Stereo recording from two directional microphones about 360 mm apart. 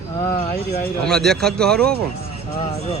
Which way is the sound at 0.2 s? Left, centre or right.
Centre.